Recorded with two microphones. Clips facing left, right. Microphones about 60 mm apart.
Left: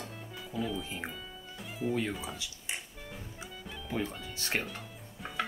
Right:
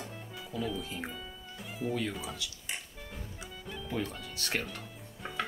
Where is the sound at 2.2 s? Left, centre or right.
Centre.